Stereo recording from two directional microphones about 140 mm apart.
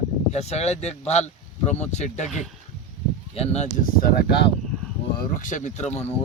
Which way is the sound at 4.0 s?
90° left.